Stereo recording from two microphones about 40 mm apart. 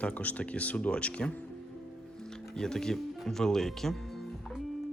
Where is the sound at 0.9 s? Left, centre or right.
Left.